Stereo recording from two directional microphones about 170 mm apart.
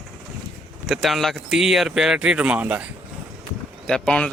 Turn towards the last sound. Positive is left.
turn(degrees=5)  # may be behind; listen again after turning